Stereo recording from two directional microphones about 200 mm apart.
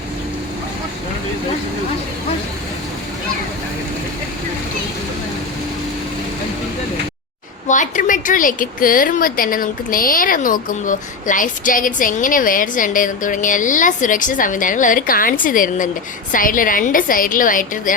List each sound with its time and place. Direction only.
7.7 s a woman's voice: 40° left (ahead or behind)